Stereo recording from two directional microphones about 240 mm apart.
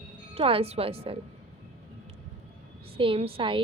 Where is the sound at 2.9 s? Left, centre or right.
Right.